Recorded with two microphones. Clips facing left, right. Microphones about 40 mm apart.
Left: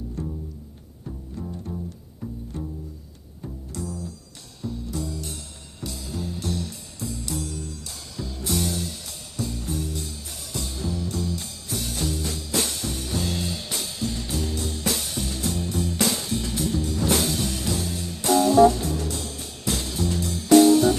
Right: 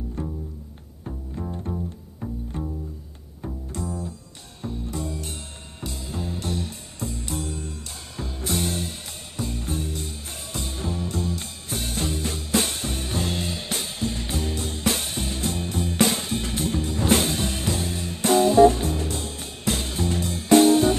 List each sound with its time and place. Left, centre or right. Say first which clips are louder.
0.2 s bowed string instrument: right 1 dB; right
3.4 s double bass: right 2 dB; right
4.6 s music: even; right